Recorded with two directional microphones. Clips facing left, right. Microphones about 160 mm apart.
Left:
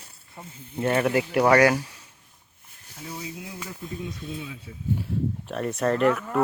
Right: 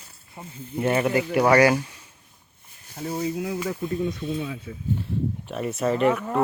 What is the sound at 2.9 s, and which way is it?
Speech, 50° right (ahead or behind).